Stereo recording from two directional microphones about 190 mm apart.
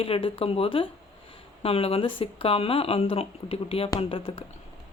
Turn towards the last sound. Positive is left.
turn(degrees=30)  # may be behind; listen again after turning